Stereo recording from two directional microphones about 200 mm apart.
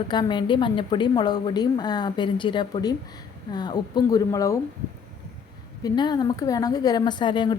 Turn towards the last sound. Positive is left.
turn(degrees=25)  # may be behind; listen again after turning